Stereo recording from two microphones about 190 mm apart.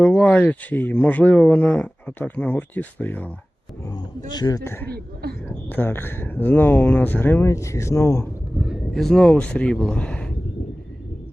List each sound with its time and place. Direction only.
0.0 s speech: 5° left (ahead or behind)
4.3 s speech: 20° left (ahead or behind)
5.2 s a sound: 55° right (ahead or behind)
5.6 s speech: 10° left (ahead or behind)
8.6 s speech: centre (ahead or behind)